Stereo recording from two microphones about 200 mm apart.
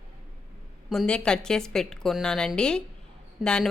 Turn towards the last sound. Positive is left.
turn(degrees=5)  # may be behind; listen again after turning